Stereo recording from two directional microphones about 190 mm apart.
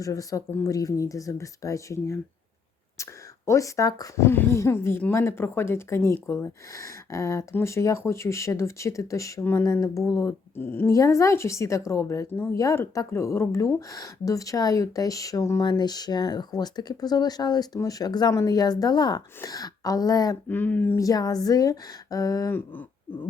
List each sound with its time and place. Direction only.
0.0 s speech: 20° left (ahead or behind)